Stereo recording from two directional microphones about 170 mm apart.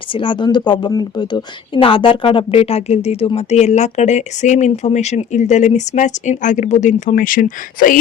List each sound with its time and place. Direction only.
0.1 s a woman's voice: 30° left (ahead or behind); by 7.9 s 50° left (ahead or behind)